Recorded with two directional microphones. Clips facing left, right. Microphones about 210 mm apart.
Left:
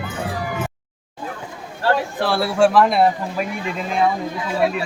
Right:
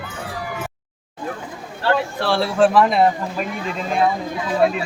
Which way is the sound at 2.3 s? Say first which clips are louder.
Even; 10° left (ahead or behind).